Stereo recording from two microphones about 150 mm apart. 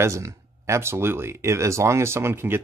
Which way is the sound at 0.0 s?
20° right (ahead or behind).